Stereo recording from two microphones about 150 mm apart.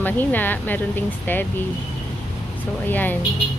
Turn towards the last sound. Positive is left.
turn(degrees=10)  # may be behind; listen again after turning